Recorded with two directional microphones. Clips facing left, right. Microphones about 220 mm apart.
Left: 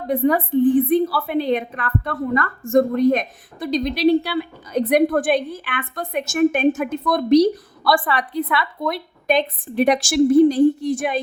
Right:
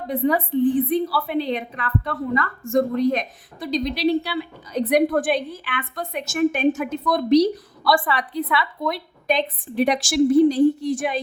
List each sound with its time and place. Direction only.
0.1 s a woman's voice: 50° left (ahead or behind)